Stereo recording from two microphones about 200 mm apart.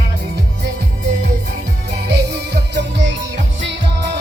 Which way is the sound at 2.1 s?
55° right (ahead or behind).